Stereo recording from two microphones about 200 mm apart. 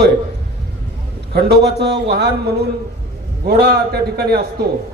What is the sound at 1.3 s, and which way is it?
A man's voice, 55° right (ahead or behind).